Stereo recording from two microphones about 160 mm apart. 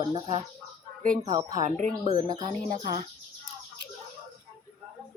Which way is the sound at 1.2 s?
25° right (ahead or behind).